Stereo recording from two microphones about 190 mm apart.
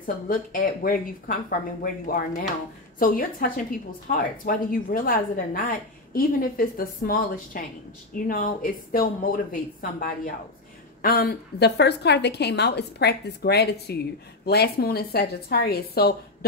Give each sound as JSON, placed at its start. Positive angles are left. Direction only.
{"t": 0.0, "sound": "a woman's voice", "side_deg": 45}